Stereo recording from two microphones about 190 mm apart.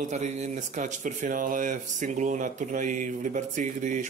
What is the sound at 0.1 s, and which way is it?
Speech, 40° right (ahead or behind).